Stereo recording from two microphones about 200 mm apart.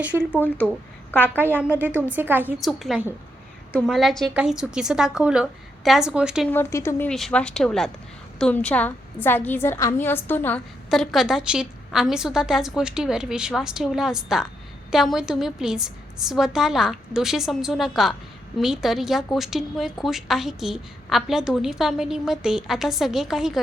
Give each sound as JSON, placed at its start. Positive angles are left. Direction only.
{"t": 0.0, "sound": "a woman's voice", "side_deg": -5}
{"t": 1.4, "sound": "a woman's voice", "side_deg": -10}
{"t": 6.5, "sound": "a woman's voice", "side_deg": 15}
{"t": 7.1, "sound": "a woman's voice", "side_deg": 0}